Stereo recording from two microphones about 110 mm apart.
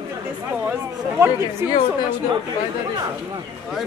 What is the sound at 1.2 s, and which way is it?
Speech, 25° right (ahead or behind).